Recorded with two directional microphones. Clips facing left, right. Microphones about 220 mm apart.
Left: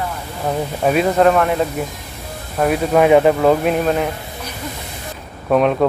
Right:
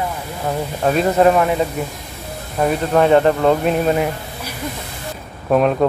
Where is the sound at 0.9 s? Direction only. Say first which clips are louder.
Even; centre (ahead or behind).